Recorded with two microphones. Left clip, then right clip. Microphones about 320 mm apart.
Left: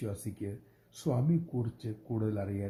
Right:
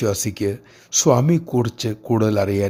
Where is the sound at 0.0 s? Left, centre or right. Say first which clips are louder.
Right 19 dB; right.